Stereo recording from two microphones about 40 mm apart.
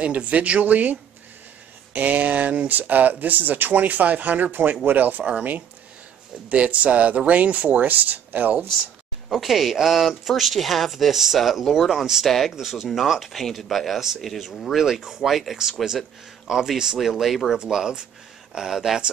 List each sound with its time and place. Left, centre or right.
0.0 s speech: right
2.0 s speech: right
6.5 s speech: right
9.3 s speech: centre
16.4 s speech: centre
17.5 s speech: centre